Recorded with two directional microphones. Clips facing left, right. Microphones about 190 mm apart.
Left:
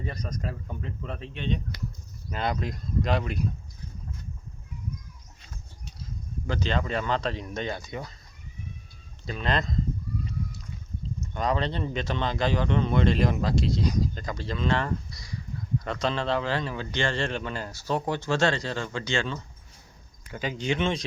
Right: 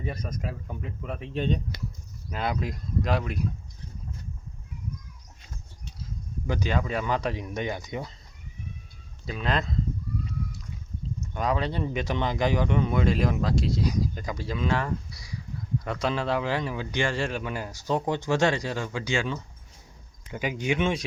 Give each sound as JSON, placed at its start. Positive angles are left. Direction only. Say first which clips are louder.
{"t": 0.0, "sound": "speech", "louder": "right 1 dB", "side_deg": -10}
{"t": 1.3, "sound": "speech", "louder": "right 4 dB", "side_deg": -40}
{"t": 2.3, "sound": "speech", "louder": "even", "side_deg": -5}
{"t": 6.5, "sound": "speech", "louder": "even", "side_deg": -10}
{"t": 9.2, "sound": "speech", "louder": "even", "side_deg": -5}
{"t": 11.2, "sound": "speech", "louder": "even", "side_deg": -5}